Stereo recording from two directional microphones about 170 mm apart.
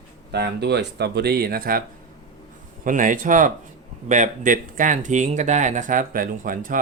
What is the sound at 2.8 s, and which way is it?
Speech, 50° right (ahead or behind).